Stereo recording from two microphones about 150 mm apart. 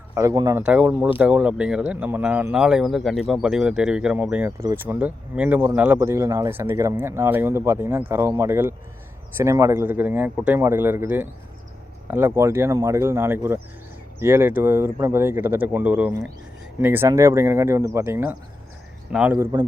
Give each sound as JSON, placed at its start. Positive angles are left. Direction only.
{"t": 0.1, "sound": "speech", "side_deg": -20}
{"t": 0.6, "sound": "speech", "side_deg": -10}
{"t": 19.4, "sound": "speech", "side_deg": -25}